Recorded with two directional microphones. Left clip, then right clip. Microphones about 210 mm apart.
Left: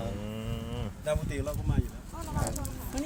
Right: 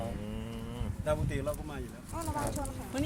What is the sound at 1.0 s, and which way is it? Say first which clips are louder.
Speech: even; centre (ahead or behind).